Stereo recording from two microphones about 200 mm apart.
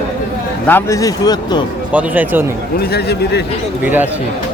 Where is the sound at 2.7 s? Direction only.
55° left (ahead or behind).